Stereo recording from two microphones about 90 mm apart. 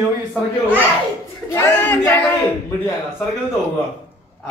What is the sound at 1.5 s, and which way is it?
Speech, 30° left (ahead or behind).